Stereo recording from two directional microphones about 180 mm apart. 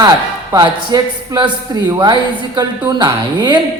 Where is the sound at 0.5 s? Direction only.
25° right (ahead or behind).